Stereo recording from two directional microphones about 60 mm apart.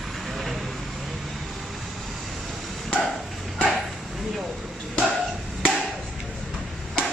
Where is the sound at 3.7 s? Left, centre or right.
Centre.